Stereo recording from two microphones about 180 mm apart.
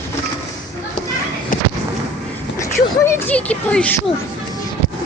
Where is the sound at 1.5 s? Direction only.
50° left (ahead or behind).